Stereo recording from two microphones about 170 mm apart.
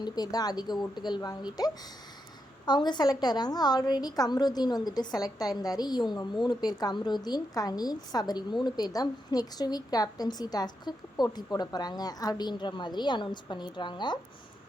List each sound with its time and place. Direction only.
0.0 s a woman's voice: 25° left (ahead or behind)